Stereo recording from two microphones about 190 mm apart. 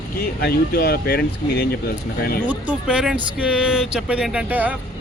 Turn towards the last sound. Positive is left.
turn(degrees=-10)  # may be behind; listen again after turning